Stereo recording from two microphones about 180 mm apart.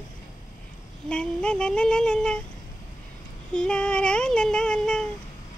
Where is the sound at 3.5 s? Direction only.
5° left (ahead or behind).